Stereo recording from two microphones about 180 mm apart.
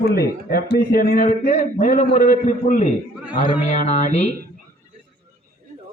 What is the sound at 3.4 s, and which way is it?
Speech, 30° left (ahead or behind).